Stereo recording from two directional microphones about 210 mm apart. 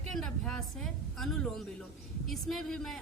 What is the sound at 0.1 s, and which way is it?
A woman's voice, 5° left (ahead or behind).